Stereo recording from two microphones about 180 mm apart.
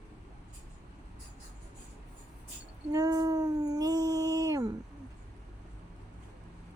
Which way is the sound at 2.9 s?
20° right (ahead or behind).